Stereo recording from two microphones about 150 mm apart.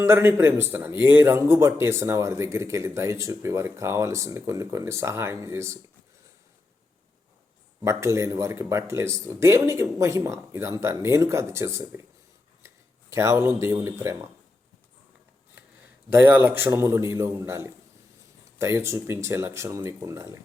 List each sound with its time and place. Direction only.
0.0 s a man's voice: 15° right (ahead or behind)
7.8 s a man's voice: 20° right (ahead or behind)
16.0 s speech: 15° right (ahead or behind)